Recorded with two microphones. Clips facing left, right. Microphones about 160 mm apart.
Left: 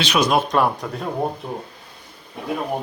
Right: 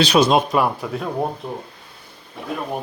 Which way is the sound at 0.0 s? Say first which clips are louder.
Right 4 dB; 30° right (ahead or behind).